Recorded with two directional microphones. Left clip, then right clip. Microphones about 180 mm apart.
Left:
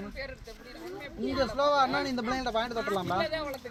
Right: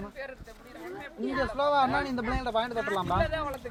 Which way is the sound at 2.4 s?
60° left (ahead or behind).